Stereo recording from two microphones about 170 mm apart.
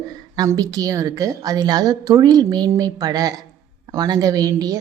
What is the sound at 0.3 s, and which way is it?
A woman's voice, 20° right (ahead or behind).